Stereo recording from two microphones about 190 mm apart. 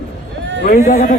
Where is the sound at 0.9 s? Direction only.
40° left (ahead or behind).